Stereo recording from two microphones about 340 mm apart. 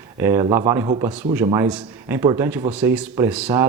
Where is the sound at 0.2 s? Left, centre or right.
Centre.